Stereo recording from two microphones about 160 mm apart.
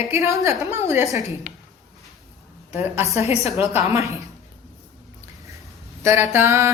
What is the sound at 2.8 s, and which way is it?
Speech, 15° right (ahead or behind).